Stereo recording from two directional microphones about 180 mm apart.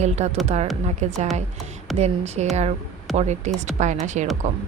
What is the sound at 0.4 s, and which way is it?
A woman's voice, 35° right (ahead or behind).